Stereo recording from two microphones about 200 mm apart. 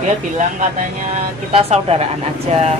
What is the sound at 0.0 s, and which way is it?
Speech, 35° right (ahead or behind).